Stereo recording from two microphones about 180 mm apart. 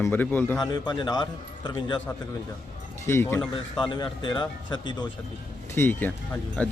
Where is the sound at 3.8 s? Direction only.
25° left (ahead or behind).